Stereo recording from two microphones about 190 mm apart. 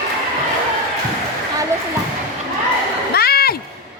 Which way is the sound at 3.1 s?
55° left (ahead or behind).